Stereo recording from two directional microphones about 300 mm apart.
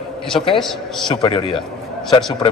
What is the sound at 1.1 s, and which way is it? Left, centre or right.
Speech, centre.